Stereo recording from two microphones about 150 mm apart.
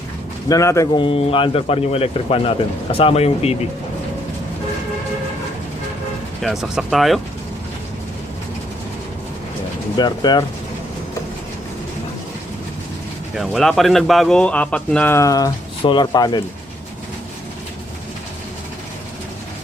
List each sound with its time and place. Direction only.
0.4 s speech: 20° left (ahead or behind)
0.9 s speech: 40° left (ahead or behind)
6.4 s speech: centre (ahead or behind)
10.0 s speech: 30° left (ahead or behind)
13.3 s speech: centre (ahead or behind); by 16.4 s 30° left (ahead or behind)